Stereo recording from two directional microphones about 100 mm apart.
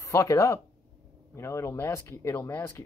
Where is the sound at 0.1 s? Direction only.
30° left (ahead or behind).